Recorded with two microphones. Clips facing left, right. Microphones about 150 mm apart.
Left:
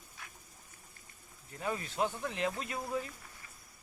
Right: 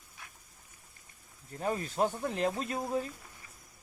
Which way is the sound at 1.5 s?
40° right (ahead or behind).